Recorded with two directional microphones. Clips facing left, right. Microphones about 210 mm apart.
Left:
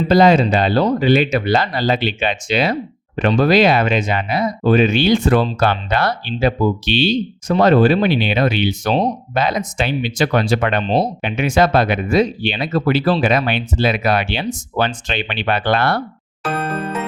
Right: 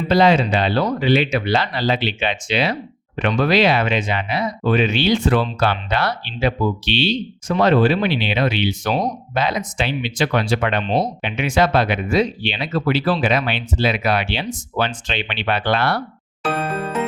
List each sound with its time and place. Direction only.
0.1 s speech: 45° left (ahead or behind)
10.8 s speech: 30° left (ahead or behind)
11.2 s speech: 45° left (ahead or behind)